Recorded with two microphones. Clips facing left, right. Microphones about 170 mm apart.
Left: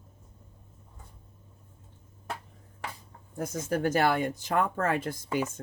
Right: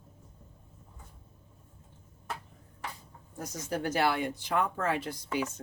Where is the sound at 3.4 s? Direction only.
50° left (ahead or behind).